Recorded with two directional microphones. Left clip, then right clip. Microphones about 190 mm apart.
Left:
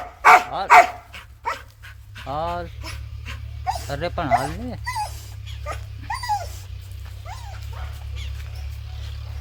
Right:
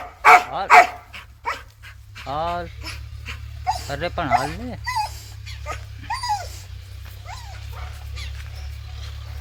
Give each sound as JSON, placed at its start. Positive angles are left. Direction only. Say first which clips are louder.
{"t": 0.0, "sound": "dog", "louder": "right 1 dB", "side_deg": 45}
{"t": 2.2, "sound": "speech", "louder": "right 1 dB", "side_deg": -5}
{"t": 2.8, "sound": "dog", "louder": "right 2 dB", "side_deg": 45}
{"t": 3.8, "sound": "speech", "louder": "even", "side_deg": 0}
{"t": 4.9, "sound": "dog", "louder": "right 3 dB", "side_deg": 45}